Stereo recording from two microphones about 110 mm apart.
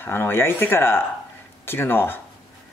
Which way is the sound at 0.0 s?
20° left (ahead or behind).